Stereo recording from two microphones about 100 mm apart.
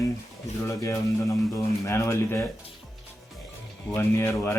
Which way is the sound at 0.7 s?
30° left (ahead or behind).